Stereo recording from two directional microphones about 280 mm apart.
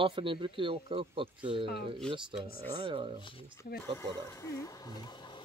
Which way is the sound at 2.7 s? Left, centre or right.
Centre.